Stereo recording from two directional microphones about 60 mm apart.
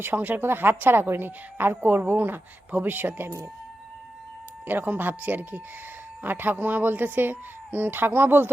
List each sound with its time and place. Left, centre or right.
0.0 s speech: right
4.6 s speech: right